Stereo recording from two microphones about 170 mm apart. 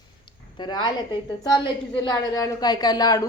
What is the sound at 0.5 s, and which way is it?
A woman's voice, 25° left (ahead or behind).